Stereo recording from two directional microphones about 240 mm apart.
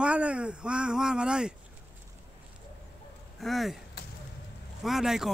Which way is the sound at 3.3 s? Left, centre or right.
Centre.